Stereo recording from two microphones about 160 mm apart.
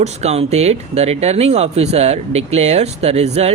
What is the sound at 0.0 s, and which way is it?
Speech, 45° right (ahead or behind).